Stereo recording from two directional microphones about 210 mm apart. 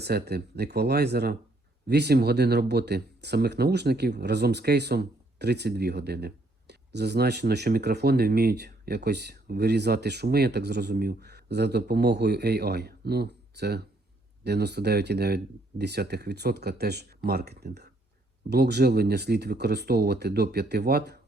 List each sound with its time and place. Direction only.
0.0 s speech: 50° right (ahead or behind)